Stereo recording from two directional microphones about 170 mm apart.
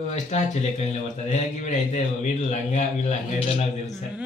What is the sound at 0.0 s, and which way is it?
A man's voice, 40° left (ahead or behind).